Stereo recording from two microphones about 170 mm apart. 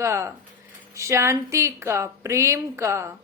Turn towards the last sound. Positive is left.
turn(degrees=-15)  # may be behind; listen again after turning